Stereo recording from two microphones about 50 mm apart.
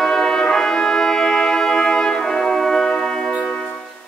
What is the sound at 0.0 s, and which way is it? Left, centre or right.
Brass instrument, centre.